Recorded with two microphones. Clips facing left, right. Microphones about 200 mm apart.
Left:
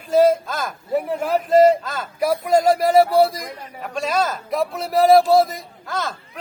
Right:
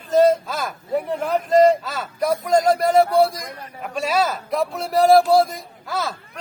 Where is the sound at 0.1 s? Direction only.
10° left (ahead or behind).